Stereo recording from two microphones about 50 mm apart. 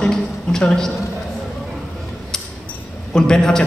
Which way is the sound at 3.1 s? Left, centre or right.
Centre.